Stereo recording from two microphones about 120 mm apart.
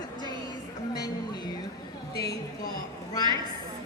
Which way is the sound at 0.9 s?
35° left (ahead or behind).